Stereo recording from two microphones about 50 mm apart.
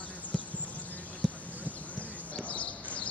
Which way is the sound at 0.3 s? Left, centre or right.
Centre.